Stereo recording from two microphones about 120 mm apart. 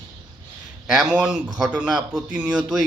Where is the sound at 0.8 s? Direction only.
5° right (ahead or behind).